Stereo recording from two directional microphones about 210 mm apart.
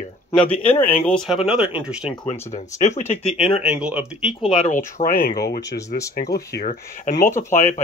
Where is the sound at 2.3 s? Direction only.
35° left (ahead or behind).